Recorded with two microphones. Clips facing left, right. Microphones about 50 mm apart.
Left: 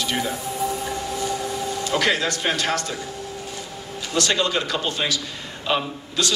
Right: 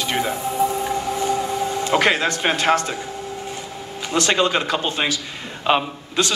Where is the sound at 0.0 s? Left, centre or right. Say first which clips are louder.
Right 3 dB; right.